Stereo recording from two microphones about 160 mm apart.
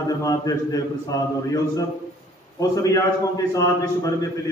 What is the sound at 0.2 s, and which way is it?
A man's voice, 20° left (ahead or behind).